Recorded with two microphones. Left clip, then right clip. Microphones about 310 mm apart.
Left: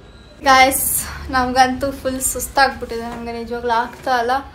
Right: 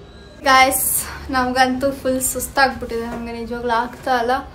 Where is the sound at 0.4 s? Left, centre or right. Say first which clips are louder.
Left 1 dB; centre.